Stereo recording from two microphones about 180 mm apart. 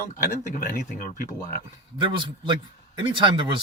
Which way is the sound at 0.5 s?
50° left (ahead or behind).